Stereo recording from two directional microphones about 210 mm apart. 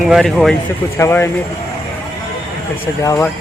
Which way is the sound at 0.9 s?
10° left (ahead or behind).